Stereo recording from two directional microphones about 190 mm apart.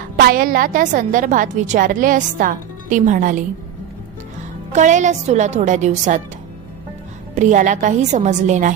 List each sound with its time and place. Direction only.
0.2 s a woman's voice: 50° right (ahead or behind)
4.7 s speech: 40° right (ahead or behind)
7.3 s speech: 40° right (ahead or behind)